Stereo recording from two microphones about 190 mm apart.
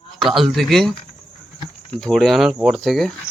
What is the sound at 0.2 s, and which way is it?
Speech, centre (ahead or behind).